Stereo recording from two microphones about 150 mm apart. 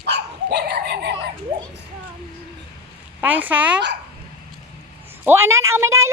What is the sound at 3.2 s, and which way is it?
Speech, 10° right (ahead or behind).